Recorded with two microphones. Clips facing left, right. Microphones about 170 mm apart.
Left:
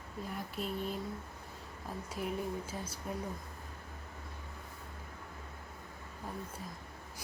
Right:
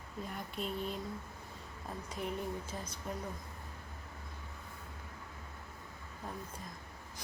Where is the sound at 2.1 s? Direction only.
5° left (ahead or behind).